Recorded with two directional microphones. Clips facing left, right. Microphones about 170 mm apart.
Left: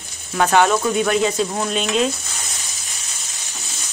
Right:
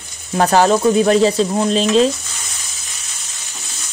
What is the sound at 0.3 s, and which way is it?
Sizzle, 35° right (ahead or behind).